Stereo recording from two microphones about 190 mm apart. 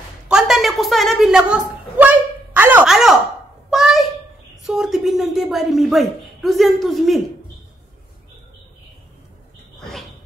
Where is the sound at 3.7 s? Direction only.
Centre (ahead or behind).